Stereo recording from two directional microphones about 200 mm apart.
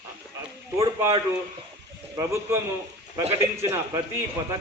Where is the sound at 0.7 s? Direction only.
15° right (ahead or behind).